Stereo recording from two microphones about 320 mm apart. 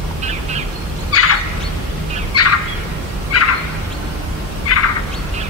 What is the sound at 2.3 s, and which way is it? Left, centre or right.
Turkey, left.